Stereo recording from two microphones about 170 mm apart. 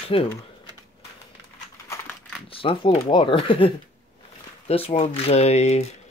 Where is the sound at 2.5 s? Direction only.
30° left (ahead or behind).